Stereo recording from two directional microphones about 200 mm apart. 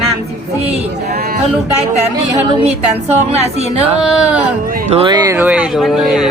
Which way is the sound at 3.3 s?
30° right (ahead or behind).